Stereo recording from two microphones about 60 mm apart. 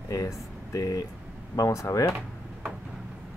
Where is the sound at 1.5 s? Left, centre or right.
Left.